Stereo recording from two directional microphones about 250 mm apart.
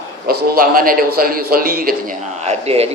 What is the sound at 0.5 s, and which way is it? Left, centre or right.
A man's voice, right.